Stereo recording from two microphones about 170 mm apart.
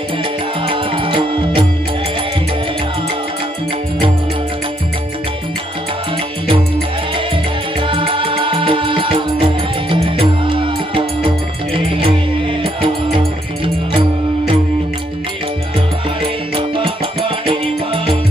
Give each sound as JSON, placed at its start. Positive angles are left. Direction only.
{"t": 0.7, "sound": "music", "side_deg": -30}
{"t": 7.8, "sound": "music", "side_deg": -30}
{"t": 16.2, "sound": "music", "side_deg": -30}